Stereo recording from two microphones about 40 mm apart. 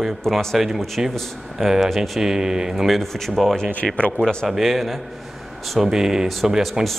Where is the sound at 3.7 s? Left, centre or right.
Left.